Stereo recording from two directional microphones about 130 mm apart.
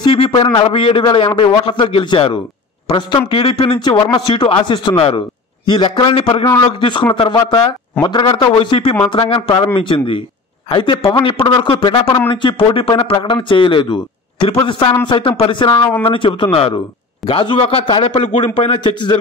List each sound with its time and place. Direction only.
0.0 s a sound: 40° left (ahead or behind)
0.7 s a man's voice: 45° left (ahead or behind)
3.3 s a man's voice: 45° left (ahead or behind)